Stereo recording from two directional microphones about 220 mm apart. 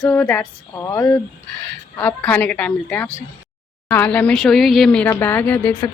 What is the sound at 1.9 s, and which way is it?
Speech, 5° left (ahead or behind).